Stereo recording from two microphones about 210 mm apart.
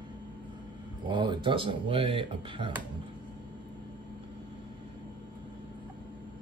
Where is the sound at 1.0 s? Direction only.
20° right (ahead or behind).